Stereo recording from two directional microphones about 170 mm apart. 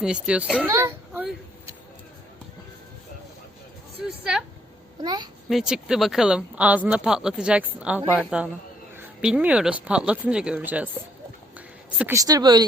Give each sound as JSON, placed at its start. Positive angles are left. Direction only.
{"t": 0.0, "sound": "speech", "side_deg": -5}
{"t": 0.7, "sound": "a sound", "side_deg": -15}
{"t": 4.0, "sound": "speech", "side_deg": -5}
{"t": 5.0, "sound": "speech", "side_deg": -25}
{"t": 5.5, "sound": "speech", "side_deg": 0}
{"t": 11.5, "sound": "a sound", "side_deg": -10}
{"t": 12.1, "sound": "speech", "side_deg": -20}